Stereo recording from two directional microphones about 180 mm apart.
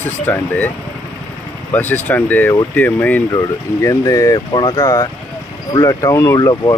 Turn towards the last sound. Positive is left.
turn(degrees=20)  # may be behind; listen again after turning